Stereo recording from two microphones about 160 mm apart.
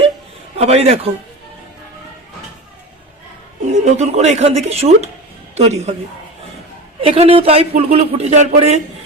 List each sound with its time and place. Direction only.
0.5 s a woman's voice: 40° right (ahead or behind)
3.8 s speech: 45° right (ahead or behind)
7.0 s a woman's voice: 35° right (ahead or behind)